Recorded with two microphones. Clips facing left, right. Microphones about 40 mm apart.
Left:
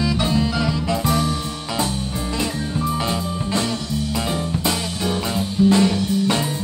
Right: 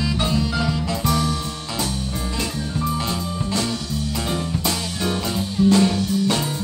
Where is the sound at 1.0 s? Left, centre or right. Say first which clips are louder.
Right 1 dB; centre.